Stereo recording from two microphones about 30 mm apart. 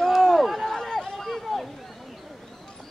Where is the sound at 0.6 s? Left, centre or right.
Centre.